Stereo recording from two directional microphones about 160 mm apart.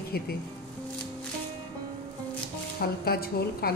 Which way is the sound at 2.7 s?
75° left (ahead or behind).